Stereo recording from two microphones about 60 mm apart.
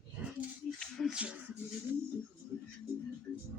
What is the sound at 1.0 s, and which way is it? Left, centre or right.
Music, centre.